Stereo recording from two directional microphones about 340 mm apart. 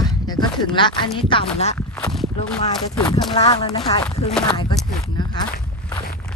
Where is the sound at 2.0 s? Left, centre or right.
Centre.